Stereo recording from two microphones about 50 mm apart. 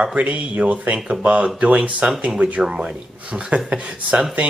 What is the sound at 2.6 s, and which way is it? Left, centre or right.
Speech, centre.